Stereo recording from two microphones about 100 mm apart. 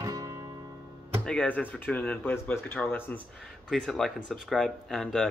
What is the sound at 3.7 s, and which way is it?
Speech, 5° left (ahead or behind).